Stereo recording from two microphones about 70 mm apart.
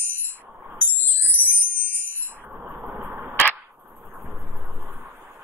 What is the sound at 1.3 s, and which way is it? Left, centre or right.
Music, left.